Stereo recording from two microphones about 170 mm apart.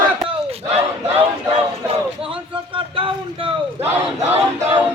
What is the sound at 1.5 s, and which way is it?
Speech, 35° right (ahead or behind).